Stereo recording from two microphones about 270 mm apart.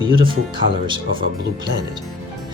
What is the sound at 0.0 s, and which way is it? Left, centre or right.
Speech, centre.